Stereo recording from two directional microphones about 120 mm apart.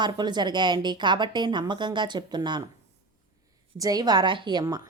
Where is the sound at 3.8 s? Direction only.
35° right (ahead or behind).